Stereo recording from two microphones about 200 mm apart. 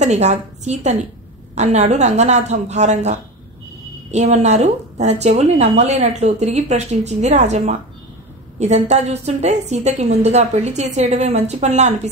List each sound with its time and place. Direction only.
0.0 s a woman's voice: 35° right (ahead or behind)